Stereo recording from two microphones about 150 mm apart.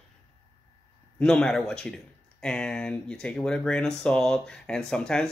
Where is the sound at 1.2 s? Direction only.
5° left (ahead or behind).